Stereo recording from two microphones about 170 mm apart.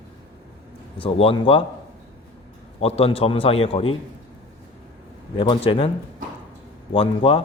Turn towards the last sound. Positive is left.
turn(degrees=35)  # may be behind; listen again after turning